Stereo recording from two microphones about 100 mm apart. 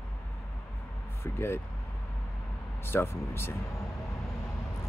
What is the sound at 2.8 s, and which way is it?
Speech, 25° left (ahead or behind).